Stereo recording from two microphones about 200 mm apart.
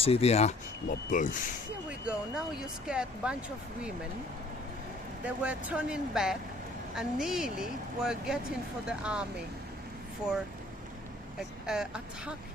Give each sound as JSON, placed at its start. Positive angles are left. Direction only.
{"t": 0.0, "sound": "speech", "side_deg": 30}
{"t": 2.0, "sound": "a woman's voice", "side_deg": -5}
{"t": 5.2, "sound": "a woman's voice", "side_deg": -5}
{"t": 11.3, "sound": "a woman's voice", "side_deg": -5}